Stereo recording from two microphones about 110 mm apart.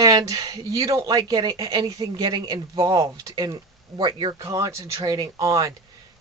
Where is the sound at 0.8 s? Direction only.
35° right (ahead or behind).